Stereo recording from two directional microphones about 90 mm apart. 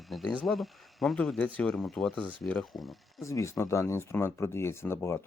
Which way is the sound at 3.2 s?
35° left (ahead or behind).